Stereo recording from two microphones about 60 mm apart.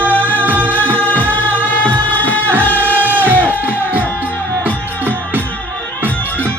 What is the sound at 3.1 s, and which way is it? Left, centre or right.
Music, right.